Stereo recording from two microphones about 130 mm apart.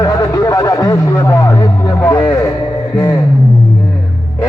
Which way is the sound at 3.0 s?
20° left (ahead or behind).